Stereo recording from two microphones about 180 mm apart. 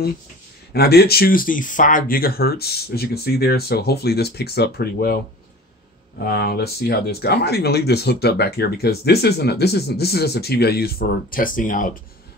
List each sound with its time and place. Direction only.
0.7 s speech: 60° left (ahead or behind)